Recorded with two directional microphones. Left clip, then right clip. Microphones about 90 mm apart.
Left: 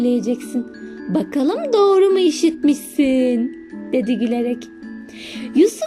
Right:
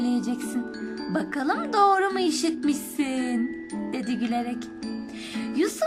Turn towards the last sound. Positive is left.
turn(degrees=35)  # may be behind; listen again after turning